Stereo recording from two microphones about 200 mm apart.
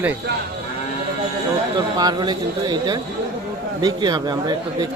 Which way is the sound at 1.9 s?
20° right (ahead or behind).